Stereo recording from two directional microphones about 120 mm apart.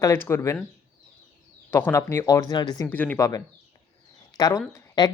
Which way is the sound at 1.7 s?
20° left (ahead or behind).